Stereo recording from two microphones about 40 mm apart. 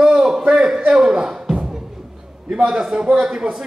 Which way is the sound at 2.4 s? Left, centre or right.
Right.